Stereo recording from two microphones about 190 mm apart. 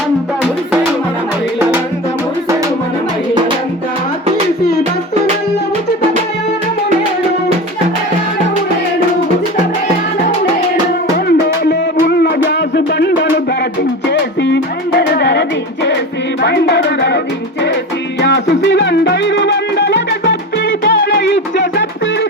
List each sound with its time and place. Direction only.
11.3 s music: 55° left (ahead or behind)
18.2 s music: 65° left (ahead or behind)